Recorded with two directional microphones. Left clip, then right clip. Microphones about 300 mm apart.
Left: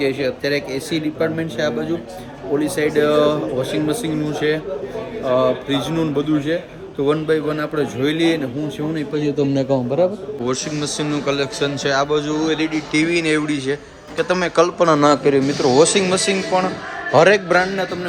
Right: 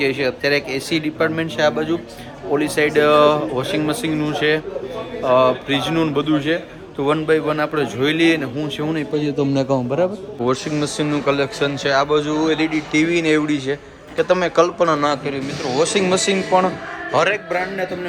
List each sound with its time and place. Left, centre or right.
0.0 s speech: centre
5.3 s speech: right
5.6 s a man's voice: centre
17.1 s a man's voice: left